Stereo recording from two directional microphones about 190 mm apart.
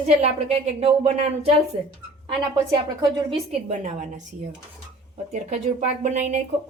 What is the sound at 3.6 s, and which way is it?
Speech, 40° right (ahead or behind).